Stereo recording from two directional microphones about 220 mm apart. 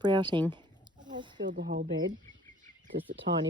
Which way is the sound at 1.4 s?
50° right (ahead or behind).